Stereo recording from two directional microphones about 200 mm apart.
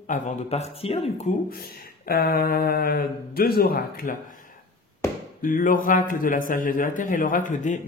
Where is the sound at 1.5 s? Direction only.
50° left (ahead or behind).